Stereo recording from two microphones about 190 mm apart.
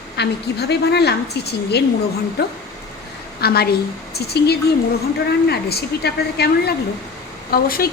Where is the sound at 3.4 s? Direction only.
55° left (ahead or behind).